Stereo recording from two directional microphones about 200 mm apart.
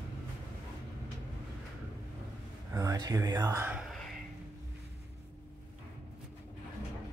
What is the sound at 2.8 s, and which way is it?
Speech, 20° right (ahead or behind).